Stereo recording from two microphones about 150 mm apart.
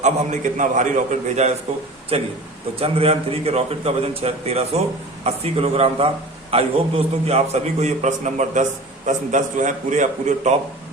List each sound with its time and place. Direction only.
0.0 s a man's voice: 55° right (ahead or behind)
2.1 s a man's voice: 40° right (ahead or behind)